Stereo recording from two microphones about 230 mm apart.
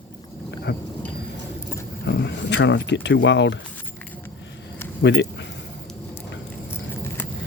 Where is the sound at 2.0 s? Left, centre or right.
Left.